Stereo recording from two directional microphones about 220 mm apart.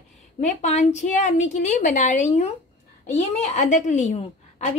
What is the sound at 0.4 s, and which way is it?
A woman's voice, 30° left (ahead or behind).